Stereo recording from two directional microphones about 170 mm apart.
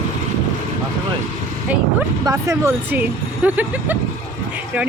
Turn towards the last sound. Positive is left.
turn(degrees=-10)  # may be behind; listen again after turning